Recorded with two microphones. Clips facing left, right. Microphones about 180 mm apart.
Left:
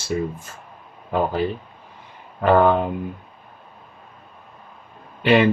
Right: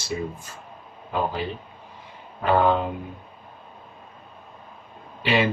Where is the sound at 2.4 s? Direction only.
50° left (ahead or behind).